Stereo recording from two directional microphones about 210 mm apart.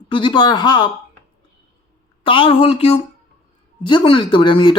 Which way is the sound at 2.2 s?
25° left (ahead or behind).